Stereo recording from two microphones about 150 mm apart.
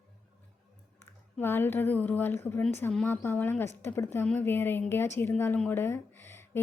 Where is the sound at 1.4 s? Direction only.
15° left (ahead or behind).